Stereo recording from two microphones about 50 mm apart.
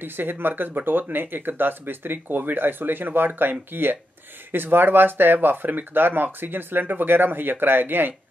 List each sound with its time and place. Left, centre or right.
0.0 s speech: right